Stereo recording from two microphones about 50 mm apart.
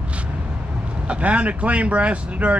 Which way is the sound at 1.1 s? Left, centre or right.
Right.